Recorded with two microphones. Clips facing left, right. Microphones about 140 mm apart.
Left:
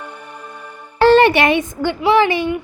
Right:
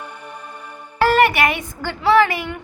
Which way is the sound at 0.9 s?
25° left (ahead or behind).